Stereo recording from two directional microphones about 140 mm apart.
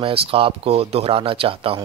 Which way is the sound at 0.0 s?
40° right (ahead or behind).